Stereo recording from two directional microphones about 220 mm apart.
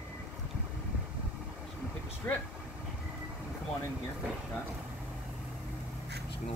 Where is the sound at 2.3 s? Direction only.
10° left (ahead or behind).